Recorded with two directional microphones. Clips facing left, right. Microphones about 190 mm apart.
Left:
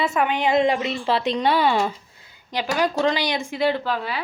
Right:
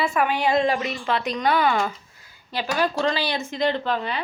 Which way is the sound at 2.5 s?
15° left (ahead or behind).